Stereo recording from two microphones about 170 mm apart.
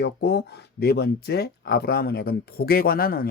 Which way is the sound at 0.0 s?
75° left (ahead or behind).